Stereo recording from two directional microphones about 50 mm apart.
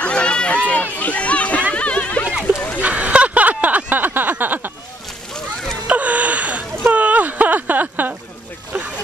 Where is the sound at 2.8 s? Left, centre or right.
Right.